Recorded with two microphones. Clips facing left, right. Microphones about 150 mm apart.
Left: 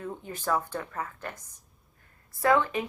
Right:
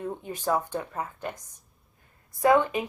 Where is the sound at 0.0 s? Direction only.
20° right (ahead or behind).